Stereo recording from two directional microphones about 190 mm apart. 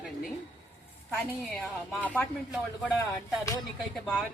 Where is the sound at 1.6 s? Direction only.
5° left (ahead or behind).